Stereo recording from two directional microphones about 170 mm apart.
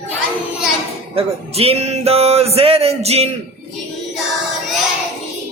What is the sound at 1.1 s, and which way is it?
Music, 35° right (ahead or behind).